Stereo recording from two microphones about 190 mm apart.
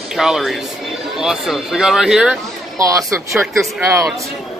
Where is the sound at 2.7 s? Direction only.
15° right (ahead or behind).